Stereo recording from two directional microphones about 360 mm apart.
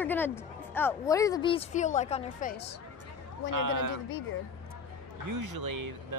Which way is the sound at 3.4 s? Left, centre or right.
Right.